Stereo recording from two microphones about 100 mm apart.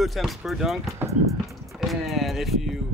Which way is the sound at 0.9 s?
30° right (ahead or behind).